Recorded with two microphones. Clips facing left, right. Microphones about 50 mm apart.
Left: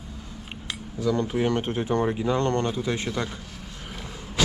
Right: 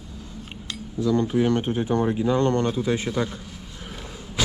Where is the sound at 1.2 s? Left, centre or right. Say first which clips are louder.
Right 5 dB; left.